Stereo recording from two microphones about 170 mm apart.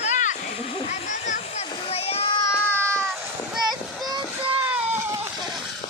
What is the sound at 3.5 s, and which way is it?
Child singing, centre (ahead or behind).